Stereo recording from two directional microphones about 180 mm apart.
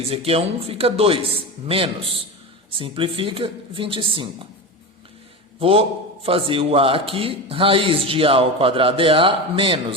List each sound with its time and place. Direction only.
0.1 s a man's voice: 35° right (ahead or behind)
5.5 s a man's voice: 30° right (ahead or behind)